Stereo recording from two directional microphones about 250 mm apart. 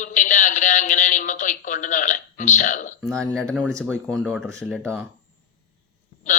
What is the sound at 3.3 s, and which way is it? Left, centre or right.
Speech, centre.